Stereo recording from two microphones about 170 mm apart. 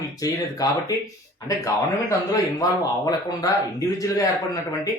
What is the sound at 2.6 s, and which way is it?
Speech, 20° left (ahead or behind).